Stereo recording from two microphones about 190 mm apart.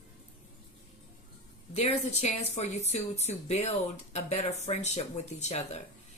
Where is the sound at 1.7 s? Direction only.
35° left (ahead or behind).